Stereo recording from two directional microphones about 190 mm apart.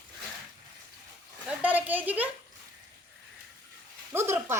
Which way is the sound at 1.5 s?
10° right (ahead or behind).